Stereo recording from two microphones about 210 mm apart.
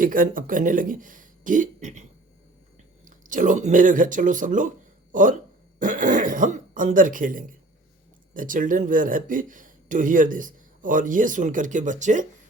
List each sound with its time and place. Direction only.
0.0 s speech: 40° right (ahead or behind)